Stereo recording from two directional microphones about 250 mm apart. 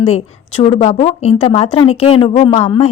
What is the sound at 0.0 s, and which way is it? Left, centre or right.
A woman's voice, left.